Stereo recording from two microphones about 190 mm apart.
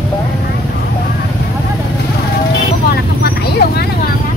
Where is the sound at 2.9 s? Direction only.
55° left (ahead or behind).